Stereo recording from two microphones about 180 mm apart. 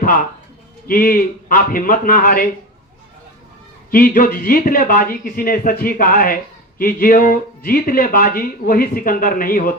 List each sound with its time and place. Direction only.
0.9 s speech: 50° left (ahead or behind)
3.9 s speech: 50° left (ahead or behind)